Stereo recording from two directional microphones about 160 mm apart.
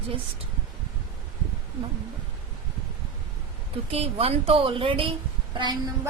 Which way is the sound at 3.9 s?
40° right (ahead or behind).